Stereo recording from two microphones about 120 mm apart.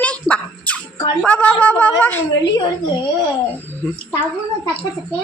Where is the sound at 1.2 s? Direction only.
10° left (ahead or behind).